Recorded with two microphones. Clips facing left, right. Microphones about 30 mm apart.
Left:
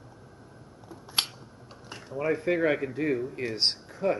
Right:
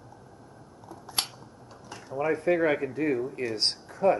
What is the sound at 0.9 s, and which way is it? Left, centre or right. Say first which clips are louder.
Camera: left 3 dB; centre.